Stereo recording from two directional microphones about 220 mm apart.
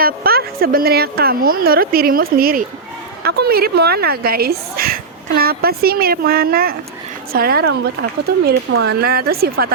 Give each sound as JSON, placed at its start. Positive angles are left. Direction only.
{"t": 0.0, "sound": "speech", "side_deg": -45}